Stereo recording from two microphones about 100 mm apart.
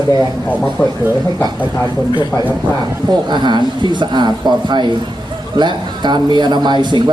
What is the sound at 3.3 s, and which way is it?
Speech, 50° right (ahead or behind).